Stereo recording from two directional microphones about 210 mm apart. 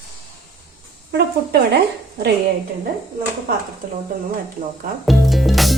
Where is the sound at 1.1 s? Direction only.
50° right (ahead or behind).